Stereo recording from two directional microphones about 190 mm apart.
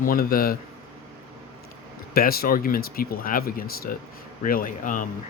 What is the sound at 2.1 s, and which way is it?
Speech, 50° left (ahead or behind).